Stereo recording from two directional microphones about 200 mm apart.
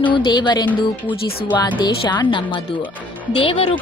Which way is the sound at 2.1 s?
20° left (ahead or behind).